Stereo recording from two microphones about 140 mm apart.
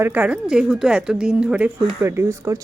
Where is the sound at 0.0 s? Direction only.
10° right (ahead or behind).